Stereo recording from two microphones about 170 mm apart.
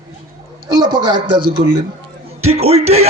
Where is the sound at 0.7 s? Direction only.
25° right (ahead or behind).